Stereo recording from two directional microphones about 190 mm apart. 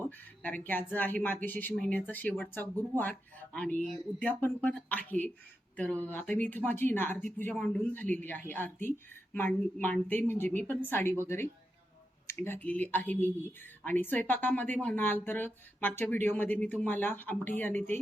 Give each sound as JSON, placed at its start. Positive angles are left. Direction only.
{"t": 0.4, "sound": "speech", "side_deg": 10}
{"t": 12.3, "sound": "speech", "side_deg": 10}